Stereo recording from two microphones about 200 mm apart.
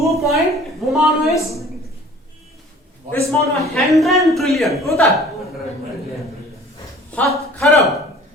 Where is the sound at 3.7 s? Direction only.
Centre (ahead or behind).